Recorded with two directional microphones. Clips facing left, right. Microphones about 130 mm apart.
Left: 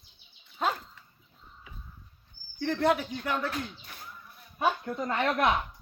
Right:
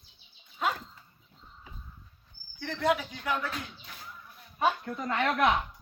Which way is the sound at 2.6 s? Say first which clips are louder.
Left 2 dB; 50° left (ahead or behind).